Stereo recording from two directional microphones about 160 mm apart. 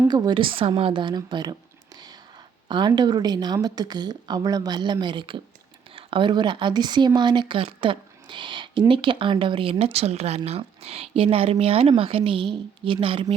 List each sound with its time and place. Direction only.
0.1 s speech: 25° right (ahead or behind)
2.6 s speech: 30° right (ahead or behind)